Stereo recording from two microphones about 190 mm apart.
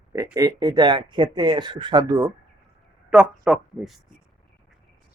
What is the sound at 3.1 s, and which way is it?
Speech, 5° right (ahead or behind).